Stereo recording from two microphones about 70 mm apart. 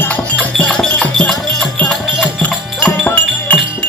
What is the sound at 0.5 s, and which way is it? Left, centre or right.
Music, centre.